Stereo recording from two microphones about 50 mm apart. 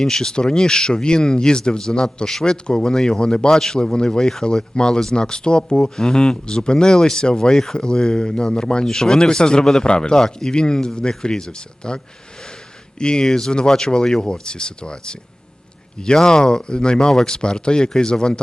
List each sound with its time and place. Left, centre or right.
0.0 s speech: centre
13.0 s speech: centre